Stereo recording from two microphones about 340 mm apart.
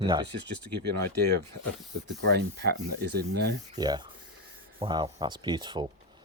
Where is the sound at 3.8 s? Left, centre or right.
Centre.